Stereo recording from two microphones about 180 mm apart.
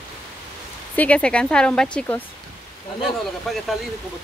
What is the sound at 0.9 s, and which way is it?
Speech, 5° left (ahead or behind).